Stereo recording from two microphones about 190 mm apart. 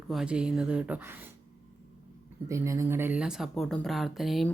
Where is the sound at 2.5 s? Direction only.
15° right (ahead or behind).